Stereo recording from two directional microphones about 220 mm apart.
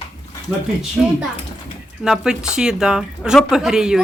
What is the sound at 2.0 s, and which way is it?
Speech, centre (ahead or behind).